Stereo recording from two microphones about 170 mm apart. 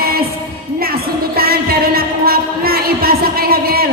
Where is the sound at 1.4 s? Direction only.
65° right (ahead or behind).